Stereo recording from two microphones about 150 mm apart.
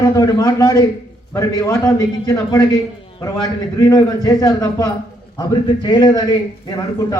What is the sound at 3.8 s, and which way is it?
A man's voice, 25° left (ahead or behind).